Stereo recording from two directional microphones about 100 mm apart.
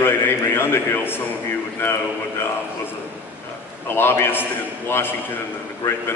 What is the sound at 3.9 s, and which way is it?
Speech, 25° left (ahead or behind).